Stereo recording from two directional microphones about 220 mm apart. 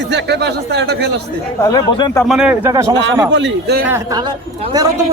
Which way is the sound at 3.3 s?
50° right (ahead or behind).